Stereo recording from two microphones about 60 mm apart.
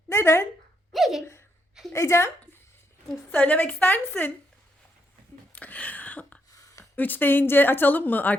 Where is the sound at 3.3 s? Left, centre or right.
Left.